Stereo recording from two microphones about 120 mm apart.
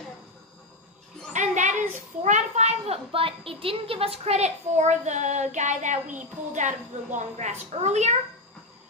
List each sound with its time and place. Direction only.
1.3 s a child's voice: 90° right; by 8.1 s 70° right (ahead or behind)